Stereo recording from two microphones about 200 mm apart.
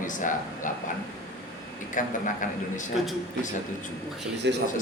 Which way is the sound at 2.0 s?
40° left (ahead or behind).